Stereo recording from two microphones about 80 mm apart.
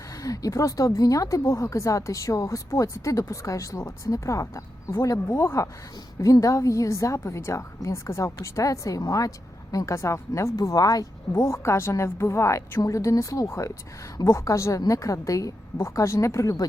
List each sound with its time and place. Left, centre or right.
0.2 s a woman's voice: left
11.4 s a woman's voice: left